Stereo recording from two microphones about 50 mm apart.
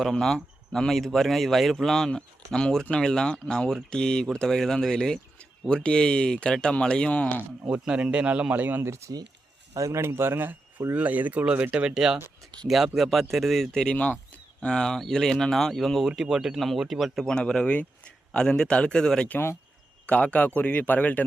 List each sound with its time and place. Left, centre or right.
0.0 s speech: centre; by 7.4 s left
7.7 s a man's voice: right
8.8 s speech: right
9.7 s speech: right
11.7 s a man's voice: centre
13.8 s speech: left
14.6 s speech: centre
16.0 s speech: centre
17.2 s speech: centre
20.1 s speech: left